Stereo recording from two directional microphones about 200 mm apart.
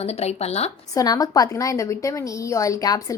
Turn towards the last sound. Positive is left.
turn(degrees=15)  # may be behind; listen again after turning